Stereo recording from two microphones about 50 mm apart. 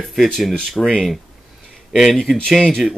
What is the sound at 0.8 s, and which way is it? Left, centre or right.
Speech, centre.